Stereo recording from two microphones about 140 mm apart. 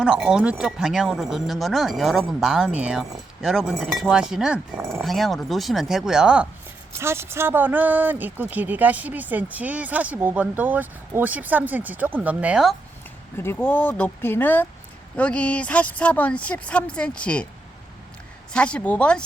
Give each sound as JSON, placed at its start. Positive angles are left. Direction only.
{"t": 0.0, "sound": "speech", "side_deg": -5}
{"t": 4.8, "sound": "speech", "side_deg": -20}
{"t": 5.0, "sound": "speech", "side_deg": 0}
{"t": 7.0, "sound": "speech", "side_deg": -20}
{"t": 13.3, "sound": "speech", "side_deg": 15}
{"t": 18.5, "sound": "speech", "side_deg": 5}